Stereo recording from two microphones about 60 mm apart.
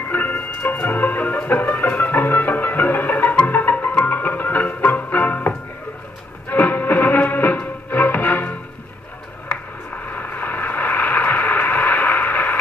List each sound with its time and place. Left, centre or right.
0.1 s music: left
6.5 s music: left
9.5 s a sound: left